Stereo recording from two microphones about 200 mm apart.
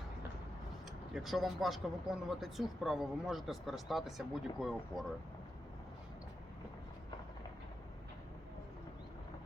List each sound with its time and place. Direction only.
1.1 s speech: centre (ahead or behind)